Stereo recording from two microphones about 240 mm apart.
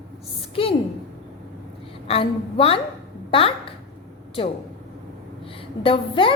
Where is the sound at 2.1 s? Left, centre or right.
Left.